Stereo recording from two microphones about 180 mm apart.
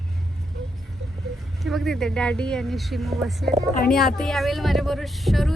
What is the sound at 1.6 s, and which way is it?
Speech, centre (ahead or behind).